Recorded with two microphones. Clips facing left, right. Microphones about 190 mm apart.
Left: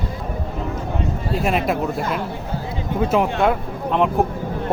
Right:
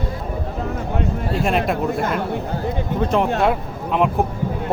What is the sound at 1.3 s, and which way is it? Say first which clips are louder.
Speech: even; centre (ahead or behind).